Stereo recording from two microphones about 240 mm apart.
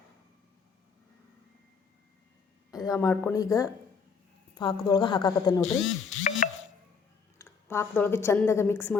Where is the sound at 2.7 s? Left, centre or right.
Centre.